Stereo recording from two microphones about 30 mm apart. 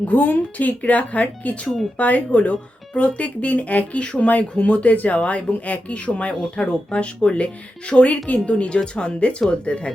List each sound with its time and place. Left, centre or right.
0.0 s speech: left
4.3 s speech: left